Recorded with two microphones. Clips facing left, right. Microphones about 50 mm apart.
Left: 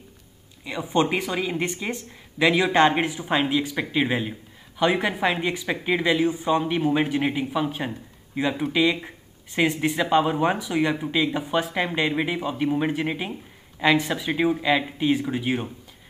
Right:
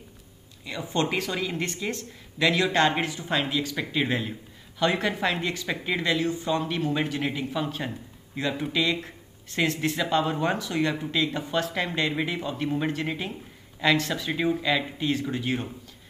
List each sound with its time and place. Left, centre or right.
0.7 s speech: centre